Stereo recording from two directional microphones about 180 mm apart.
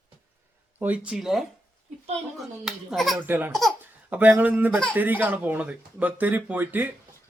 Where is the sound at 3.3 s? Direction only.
10° right (ahead or behind).